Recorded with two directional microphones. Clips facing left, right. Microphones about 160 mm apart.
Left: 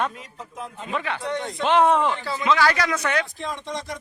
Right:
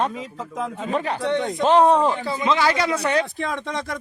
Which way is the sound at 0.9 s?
40° right (ahead or behind).